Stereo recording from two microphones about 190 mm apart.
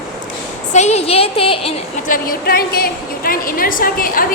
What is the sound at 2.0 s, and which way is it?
A woman's voice, 50° left (ahead or behind).